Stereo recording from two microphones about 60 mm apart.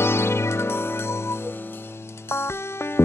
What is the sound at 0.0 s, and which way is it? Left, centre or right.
Music, left.